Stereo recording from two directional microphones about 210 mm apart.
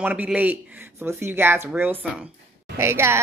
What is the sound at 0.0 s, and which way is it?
A man's voice, 5° right (ahead or behind).